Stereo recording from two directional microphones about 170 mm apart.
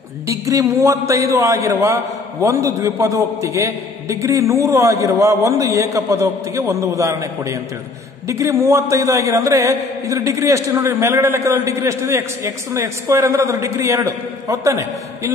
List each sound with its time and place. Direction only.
0.3 s a man's voice: 20° right (ahead or behind)